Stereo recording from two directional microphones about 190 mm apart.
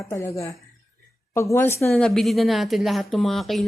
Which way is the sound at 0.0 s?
15° left (ahead or behind).